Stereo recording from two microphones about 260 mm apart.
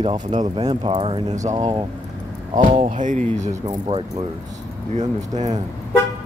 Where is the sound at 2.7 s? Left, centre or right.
Right.